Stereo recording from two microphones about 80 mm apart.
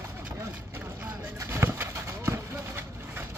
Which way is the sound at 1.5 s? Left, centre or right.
Right.